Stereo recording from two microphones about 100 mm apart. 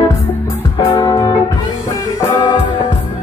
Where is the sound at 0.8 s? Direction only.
40° left (ahead or behind).